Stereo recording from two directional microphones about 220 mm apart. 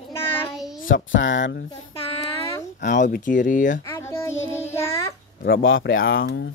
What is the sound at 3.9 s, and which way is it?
Child singing, 10° left (ahead or behind).